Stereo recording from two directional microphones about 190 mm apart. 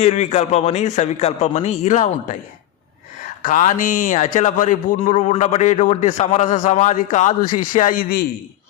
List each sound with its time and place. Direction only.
0.0 s a man's voice: 35° left (ahead or behind)
3.4 s a man's voice: 40° left (ahead or behind)